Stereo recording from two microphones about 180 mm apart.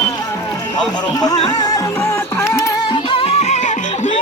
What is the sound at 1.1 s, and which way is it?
Music, 20° left (ahead or behind).